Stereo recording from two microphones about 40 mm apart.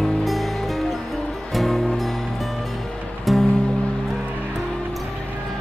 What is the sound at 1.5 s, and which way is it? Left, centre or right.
Music, centre.